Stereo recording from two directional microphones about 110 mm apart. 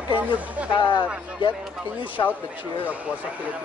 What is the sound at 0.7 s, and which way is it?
Speech, 45° left (ahead or behind).